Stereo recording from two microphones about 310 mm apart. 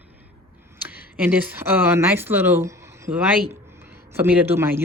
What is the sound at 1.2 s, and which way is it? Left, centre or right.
Speech, centre.